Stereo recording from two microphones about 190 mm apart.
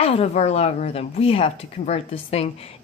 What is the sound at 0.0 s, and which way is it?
A woman's voice, 30° left (ahead or behind).